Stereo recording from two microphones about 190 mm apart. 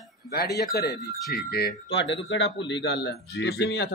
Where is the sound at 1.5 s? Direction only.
60° left (ahead or behind).